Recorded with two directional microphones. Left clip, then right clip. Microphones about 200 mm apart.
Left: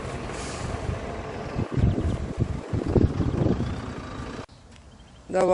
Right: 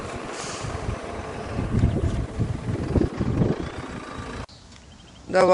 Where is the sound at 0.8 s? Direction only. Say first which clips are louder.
Right 1 dB; 45° right (ahead or behind).